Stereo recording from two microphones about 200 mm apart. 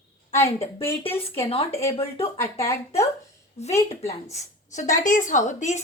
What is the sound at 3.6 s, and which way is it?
A woman's voice, 30° left (ahead or behind).